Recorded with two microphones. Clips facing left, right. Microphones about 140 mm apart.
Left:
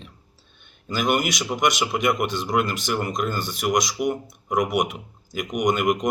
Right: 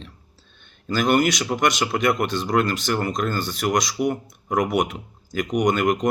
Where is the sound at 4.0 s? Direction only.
40° right (ahead or behind).